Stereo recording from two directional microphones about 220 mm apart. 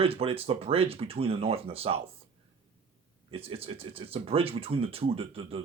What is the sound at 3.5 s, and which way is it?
Speech, 25° right (ahead or behind).